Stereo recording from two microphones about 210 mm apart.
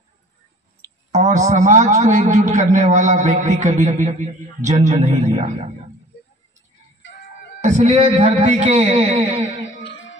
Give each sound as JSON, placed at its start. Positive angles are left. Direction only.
{"t": 1.1, "sound": "a man's voice", "side_deg": -35}
{"t": 7.6, "sound": "a man's voice", "side_deg": -35}